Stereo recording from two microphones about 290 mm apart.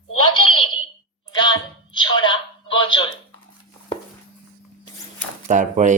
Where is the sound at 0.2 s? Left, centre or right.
Centre.